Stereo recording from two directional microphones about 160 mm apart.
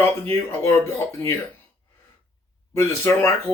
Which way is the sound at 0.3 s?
15° left (ahead or behind).